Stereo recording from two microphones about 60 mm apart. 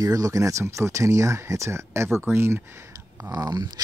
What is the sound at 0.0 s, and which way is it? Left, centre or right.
Speech, right.